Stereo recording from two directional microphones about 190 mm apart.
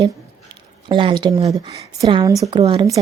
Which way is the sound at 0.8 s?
25° right (ahead or behind).